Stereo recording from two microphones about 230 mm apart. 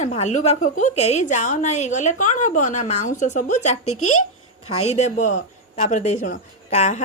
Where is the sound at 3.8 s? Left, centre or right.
Left.